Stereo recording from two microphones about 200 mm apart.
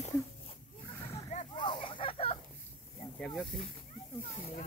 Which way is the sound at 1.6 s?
25° left (ahead or behind).